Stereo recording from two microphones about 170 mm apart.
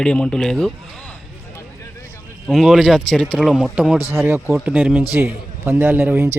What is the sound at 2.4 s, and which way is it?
Speech, centre (ahead or behind).